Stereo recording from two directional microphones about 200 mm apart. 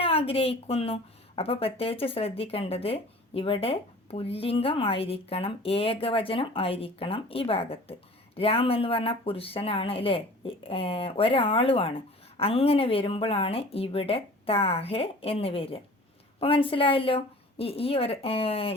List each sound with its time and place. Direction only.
0.0 s speech: 30° left (ahead or behind)